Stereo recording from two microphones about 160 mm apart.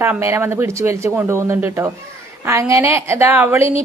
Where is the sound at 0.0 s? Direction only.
15° right (ahead or behind).